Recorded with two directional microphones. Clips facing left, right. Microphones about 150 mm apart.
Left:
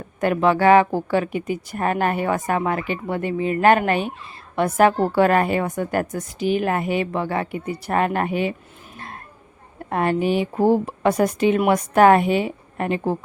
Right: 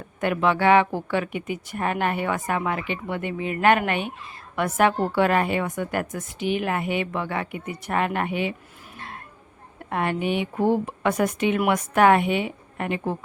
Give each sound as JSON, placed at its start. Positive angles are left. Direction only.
{"t": 0.2, "sound": "a woman's voice", "side_deg": 40}
{"t": 9.9, "sound": "a woman's voice", "side_deg": 35}